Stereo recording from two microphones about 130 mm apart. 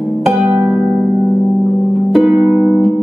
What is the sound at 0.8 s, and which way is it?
Music, 5° left (ahead or behind).